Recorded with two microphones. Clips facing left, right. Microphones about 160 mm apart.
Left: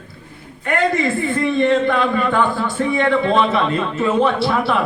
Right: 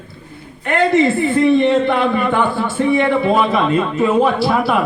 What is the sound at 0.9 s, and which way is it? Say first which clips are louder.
Speech: right 6 dB; 25° right (ahead or behind).